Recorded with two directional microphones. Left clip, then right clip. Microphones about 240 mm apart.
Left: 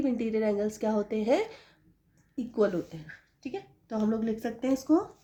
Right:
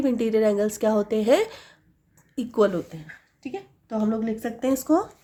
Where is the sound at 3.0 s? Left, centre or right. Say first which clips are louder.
Right 4 dB; centre.